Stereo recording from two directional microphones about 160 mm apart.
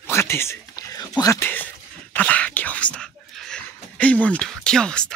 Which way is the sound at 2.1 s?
10° left (ahead or behind).